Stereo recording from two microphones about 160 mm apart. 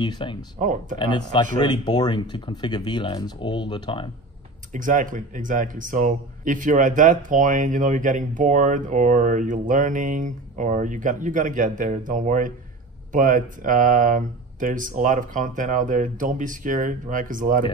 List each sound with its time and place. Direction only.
0.0 s speech: 30° left (ahead or behind)
0.6 s speech: 55° right (ahead or behind)
0.9 s speech: 30° left (ahead or behind)
4.7 s speech: 55° right (ahead or behind)